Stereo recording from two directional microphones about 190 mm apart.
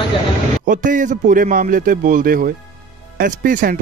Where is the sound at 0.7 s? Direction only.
45° right (ahead or behind).